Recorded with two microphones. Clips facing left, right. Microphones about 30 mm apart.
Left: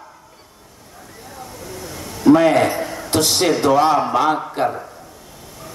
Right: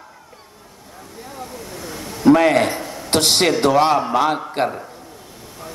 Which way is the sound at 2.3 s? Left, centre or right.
Right.